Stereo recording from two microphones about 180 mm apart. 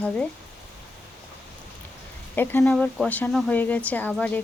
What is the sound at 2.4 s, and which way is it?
Speech, 10° left (ahead or behind).